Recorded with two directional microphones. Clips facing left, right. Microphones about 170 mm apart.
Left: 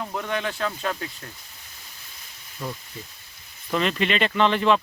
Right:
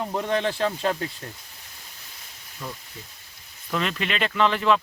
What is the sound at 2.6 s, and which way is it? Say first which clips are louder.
Speech: left 3 dB; 5° left (ahead or behind).